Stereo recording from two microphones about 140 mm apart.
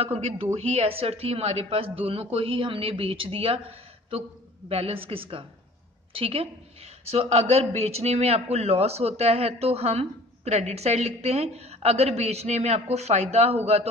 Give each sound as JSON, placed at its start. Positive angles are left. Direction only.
{"t": 0.0, "sound": "a woman's voice", "side_deg": -45}
{"t": 4.6, "sound": "a woman's voice", "side_deg": -45}